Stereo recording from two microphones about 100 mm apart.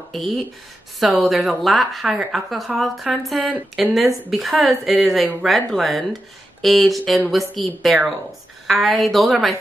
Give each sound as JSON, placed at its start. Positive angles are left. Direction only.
{"t": 0.1, "sound": "a woman's voice", "side_deg": 0}